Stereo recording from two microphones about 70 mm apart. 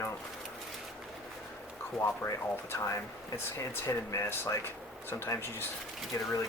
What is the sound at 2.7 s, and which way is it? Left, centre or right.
Speech, left.